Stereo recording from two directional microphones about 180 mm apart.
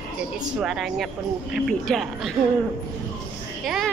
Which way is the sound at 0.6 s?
Centre (ahead or behind).